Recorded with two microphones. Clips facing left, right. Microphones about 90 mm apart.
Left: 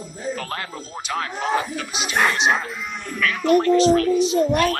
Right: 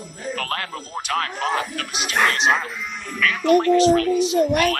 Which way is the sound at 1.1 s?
10° left (ahead or behind).